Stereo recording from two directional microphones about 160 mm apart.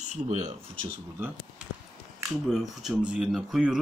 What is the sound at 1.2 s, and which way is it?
Speech, 15° right (ahead or behind).